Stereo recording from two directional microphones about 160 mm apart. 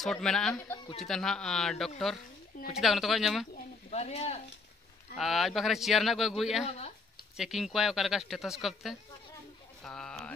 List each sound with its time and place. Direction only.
0.0 s speech: 5° left (ahead or behind)
3.9 s speech: 40° left (ahead or behind)
5.1 s speech: centre (ahead or behind)